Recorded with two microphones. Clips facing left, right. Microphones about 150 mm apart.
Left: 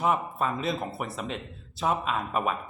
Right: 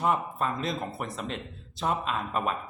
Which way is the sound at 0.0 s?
5° left (ahead or behind).